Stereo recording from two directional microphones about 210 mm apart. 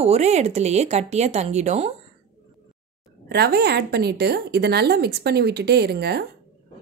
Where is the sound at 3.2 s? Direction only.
50° right (ahead or behind).